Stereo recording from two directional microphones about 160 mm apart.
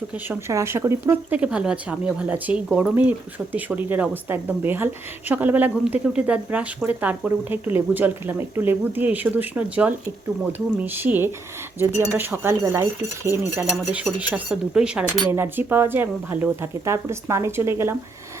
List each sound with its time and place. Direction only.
0.3 s speech: 15° right (ahead or behind)